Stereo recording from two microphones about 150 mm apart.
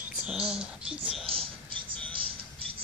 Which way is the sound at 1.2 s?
35° right (ahead or behind).